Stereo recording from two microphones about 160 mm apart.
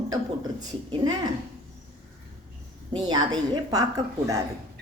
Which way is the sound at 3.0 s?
25° right (ahead or behind).